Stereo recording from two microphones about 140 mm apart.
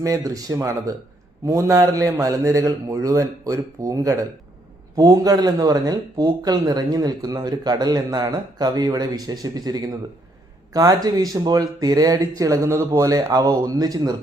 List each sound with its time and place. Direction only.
0.0 s speech: 25° right (ahead or behind)